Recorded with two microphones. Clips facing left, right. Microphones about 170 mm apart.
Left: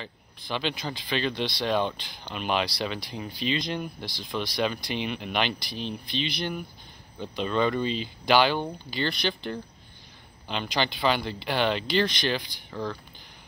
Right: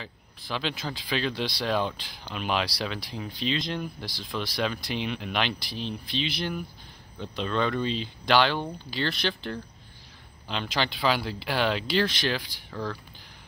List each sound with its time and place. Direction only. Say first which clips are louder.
0.0 s speech: left 1 dB; centre (ahead or behind)
10.5 s speech: left 1 dB; centre (ahead or behind)